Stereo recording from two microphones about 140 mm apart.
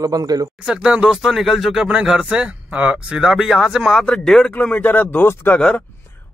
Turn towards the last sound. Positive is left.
turn(degrees=10)  # may be behind; listen again after turning